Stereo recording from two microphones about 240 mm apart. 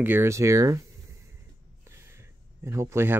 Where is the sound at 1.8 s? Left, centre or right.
Centre.